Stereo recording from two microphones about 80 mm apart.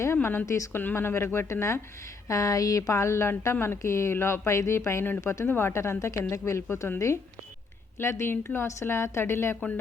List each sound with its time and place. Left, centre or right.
0.0 s a woman's voice: left
5.5 s speech: left
8.1 s speech: left